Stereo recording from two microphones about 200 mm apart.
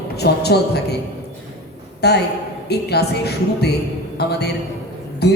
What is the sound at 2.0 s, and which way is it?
A woman's voice, 55° left (ahead or behind).